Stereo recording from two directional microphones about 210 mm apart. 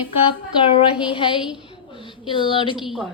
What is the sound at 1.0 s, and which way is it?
A woman's voice, 25° left (ahead or behind).